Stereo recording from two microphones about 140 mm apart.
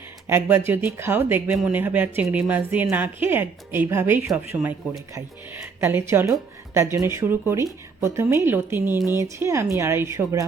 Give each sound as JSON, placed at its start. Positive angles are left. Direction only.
{"t": 0.3, "sound": "speech", "side_deg": -15}
{"t": 5.8, "sound": "speech", "side_deg": -15}